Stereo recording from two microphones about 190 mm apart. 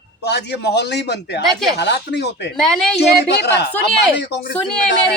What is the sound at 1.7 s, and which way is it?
Speech, 65° left (ahead or behind).